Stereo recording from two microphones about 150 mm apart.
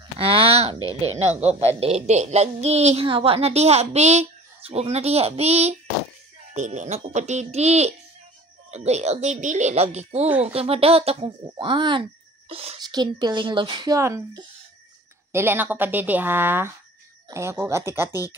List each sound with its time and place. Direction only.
0.2 s a sound: 40° right (ahead or behind)
1.6 s a woman's voice: 45° right (ahead or behind)
12.8 s a woman's voice: 30° right (ahead or behind)
13.9 s a woman's voice: 20° right (ahead or behind)